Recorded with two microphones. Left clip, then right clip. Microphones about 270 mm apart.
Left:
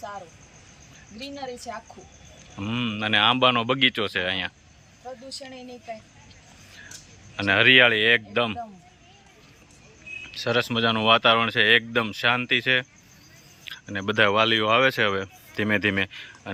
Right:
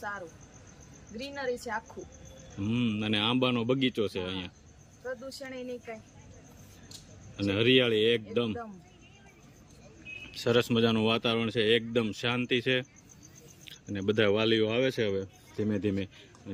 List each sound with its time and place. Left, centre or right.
1.1 s speech: centre
7.3 s speech: centre
10.3 s speech: centre
15.1 s speech: left